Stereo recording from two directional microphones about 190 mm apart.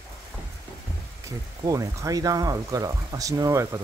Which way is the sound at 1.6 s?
15° right (ahead or behind).